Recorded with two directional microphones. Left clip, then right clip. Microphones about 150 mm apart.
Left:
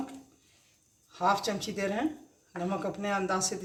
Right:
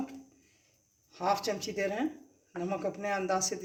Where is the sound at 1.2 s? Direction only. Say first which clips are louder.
Left 3 dB; 20° right (ahead or behind).